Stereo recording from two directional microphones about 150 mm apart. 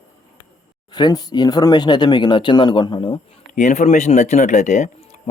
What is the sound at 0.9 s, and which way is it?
Speech, 30° left (ahead or behind).